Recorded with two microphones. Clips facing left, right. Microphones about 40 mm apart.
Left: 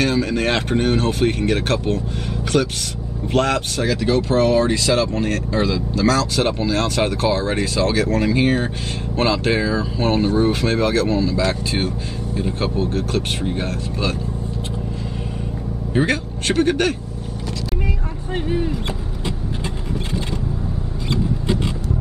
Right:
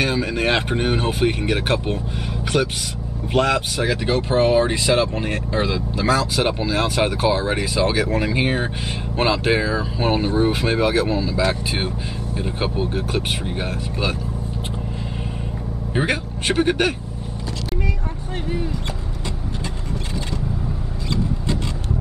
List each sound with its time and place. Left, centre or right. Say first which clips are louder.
0.0 s speech: left 2 dB; centre
15.9 s speech: left 3 dB; centre